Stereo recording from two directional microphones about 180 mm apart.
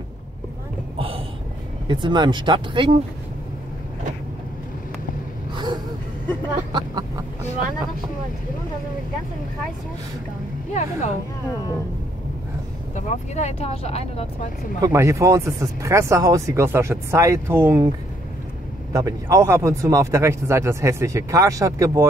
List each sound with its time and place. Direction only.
0.9 s a sound: 30° right (ahead or behind)
1.9 s speech: 25° right (ahead or behind)
6.7 s a sound: 20° right (ahead or behind)
10.7 s speech: 40° left (ahead or behind)
12.9 s speech: 40° left (ahead or behind)
14.8 s speech: 15° right (ahead or behind)
18.9 s speech: 15° right (ahead or behind)